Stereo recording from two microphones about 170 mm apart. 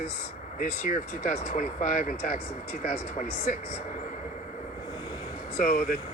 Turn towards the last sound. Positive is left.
turn(degrees=50)  # may be behind; listen again after turning